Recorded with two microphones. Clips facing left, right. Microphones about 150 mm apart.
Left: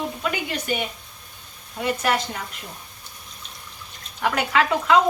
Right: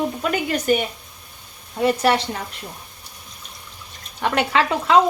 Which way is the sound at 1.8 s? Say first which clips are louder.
Right 5 dB; 30° right (ahead or behind).